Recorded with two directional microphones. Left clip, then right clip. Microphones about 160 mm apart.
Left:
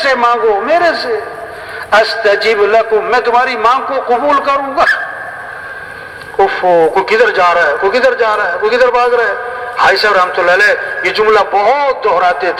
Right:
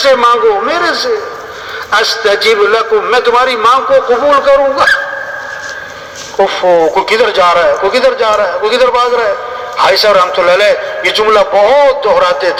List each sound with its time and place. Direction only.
0.0 s a man's voice: 45° left (ahead or behind)
6.4 s a man's voice: 40° left (ahead or behind)